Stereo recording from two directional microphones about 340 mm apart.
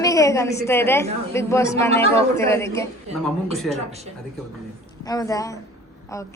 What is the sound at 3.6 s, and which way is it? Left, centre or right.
Speech, centre.